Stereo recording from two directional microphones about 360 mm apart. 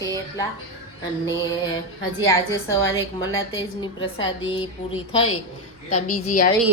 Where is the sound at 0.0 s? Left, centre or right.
Centre.